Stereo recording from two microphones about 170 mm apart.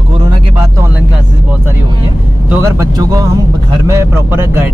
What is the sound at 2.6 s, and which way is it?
Speech, 20° right (ahead or behind).